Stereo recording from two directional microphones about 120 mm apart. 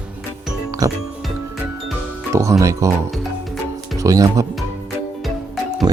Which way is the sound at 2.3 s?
25° right (ahead or behind).